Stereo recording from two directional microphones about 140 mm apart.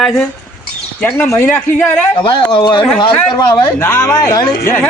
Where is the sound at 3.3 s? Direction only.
25° left (ahead or behind).